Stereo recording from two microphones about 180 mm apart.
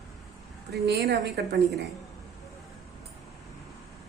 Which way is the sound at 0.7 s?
65° right (ahead or behind).